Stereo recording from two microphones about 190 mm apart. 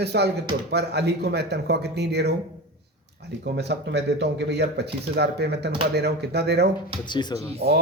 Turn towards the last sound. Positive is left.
turn(degrees=-60)  # may be behind; listen again after turning